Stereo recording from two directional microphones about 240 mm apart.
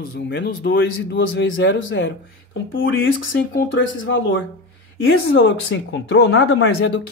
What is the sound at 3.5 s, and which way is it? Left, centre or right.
Speech, left.